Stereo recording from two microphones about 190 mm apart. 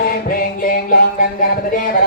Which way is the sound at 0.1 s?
50° left (ahead or behind).